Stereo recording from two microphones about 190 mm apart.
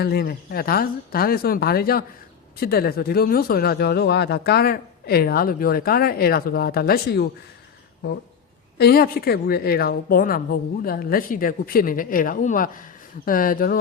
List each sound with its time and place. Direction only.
0.0 s a woman's voice: 55° left (ahead or behind)
8.8 s a woman's voice: 55° left (ahead or behind)